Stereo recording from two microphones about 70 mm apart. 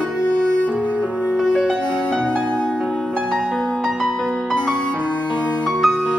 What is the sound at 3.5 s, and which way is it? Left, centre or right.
Music, centre.